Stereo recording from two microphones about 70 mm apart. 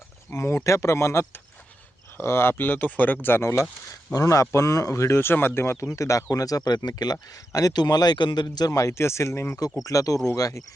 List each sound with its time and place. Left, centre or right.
0.3 s speech: left
4.1 s speech: left
6.8 s speech: left
8.7 s speech: left
9.8 s speech: left